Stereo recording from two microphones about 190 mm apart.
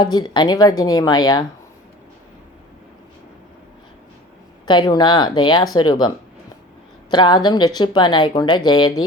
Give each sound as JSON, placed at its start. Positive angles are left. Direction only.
{"t": 0.0, "sound": "speech", "side_deg": 25}
{"t": 4.6, "sound": "speech", "side_deg": 25}